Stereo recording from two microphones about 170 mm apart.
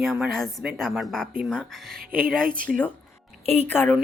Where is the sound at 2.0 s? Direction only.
55° right (ahead or behind).